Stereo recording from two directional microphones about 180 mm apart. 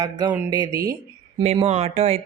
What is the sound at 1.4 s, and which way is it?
Speech, 30° right (ahead or behind).